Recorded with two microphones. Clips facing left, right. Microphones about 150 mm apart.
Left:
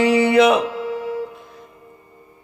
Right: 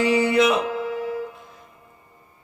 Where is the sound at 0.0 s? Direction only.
70° left (ahead or behind).